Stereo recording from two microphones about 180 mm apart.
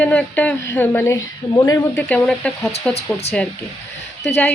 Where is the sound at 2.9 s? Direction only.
35° left (ahead or behind).